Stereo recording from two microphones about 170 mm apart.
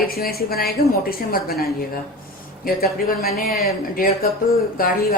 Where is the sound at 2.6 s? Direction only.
65° left (ahead or behind).